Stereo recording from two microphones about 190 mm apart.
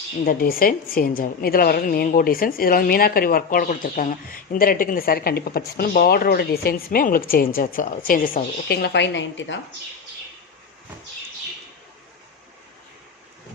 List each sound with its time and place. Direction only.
0.3 s speech: 50° left (ahead or behind); by 9.6 s 70° left (ahead or behind)